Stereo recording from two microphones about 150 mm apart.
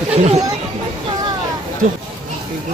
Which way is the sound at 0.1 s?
45° right (ahead or behind).